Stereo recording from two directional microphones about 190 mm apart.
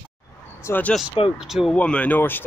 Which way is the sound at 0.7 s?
10° left (ahead or behind).